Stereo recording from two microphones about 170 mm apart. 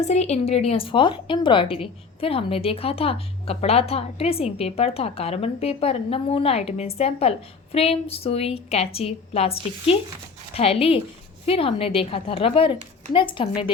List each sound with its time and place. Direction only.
0.1 s a woman's voice: 40° left (ahead or behind)